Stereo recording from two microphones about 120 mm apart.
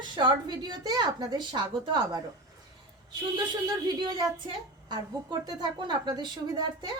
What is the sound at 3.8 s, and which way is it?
A woman's voice, 35° right (ahead or behind).